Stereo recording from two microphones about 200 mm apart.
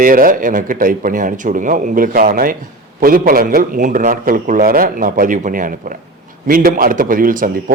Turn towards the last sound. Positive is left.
turn(degrees=-45)  # may be behind; listen again after turning